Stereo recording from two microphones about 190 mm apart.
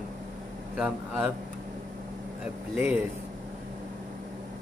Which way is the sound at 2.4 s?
5° right (ahead or behind).